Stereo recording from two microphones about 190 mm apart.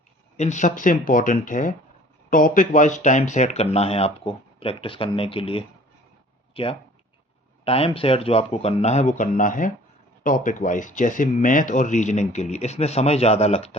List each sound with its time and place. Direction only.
0.3 s speech: 40° left (ahead or behind)